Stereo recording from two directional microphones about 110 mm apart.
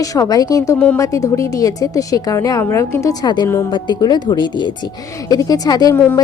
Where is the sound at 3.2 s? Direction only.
40° left (ahead or behind).